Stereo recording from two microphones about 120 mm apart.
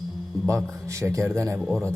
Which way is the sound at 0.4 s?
25° right (ahead or behind).